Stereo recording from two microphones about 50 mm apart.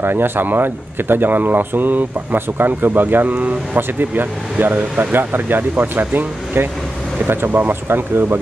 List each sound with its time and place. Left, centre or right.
0.0 s speech: right